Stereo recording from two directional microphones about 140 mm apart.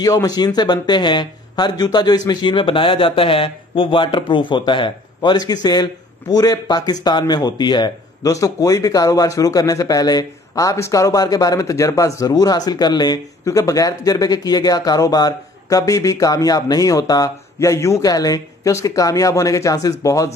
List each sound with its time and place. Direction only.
0.0 s speech: 25° left (ahead or behind)